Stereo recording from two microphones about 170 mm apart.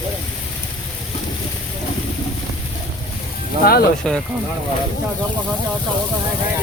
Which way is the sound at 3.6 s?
65° left (ahead or behind).